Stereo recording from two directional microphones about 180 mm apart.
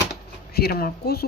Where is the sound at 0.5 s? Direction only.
60° left (ahead or behind).